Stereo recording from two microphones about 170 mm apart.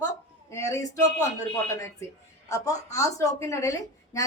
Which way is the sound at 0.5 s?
20° left (ahead or behind).